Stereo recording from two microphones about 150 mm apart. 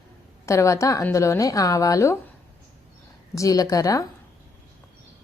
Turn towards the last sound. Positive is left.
turn(degrees=20)  # may be behind; listen again after turning